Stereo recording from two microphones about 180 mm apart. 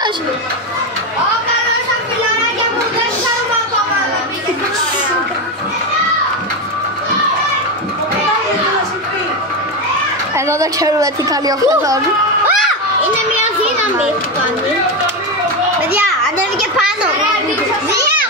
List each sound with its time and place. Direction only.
10.3 s speech: 15° right (ahead or behind)